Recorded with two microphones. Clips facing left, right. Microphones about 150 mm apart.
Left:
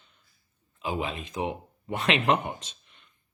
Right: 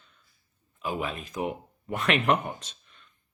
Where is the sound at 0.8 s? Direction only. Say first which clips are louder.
Left 1 dB; 30° left (ahead or behind).